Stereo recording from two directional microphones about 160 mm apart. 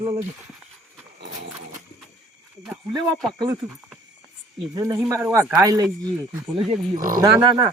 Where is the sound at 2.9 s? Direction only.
25° right (ahead or behind).